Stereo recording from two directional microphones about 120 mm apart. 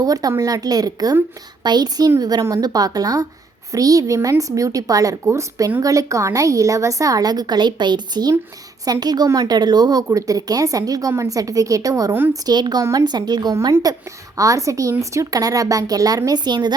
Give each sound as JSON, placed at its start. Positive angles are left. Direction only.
{"t": 0.0, "sound": "a woman's voice", "side_deg": -30}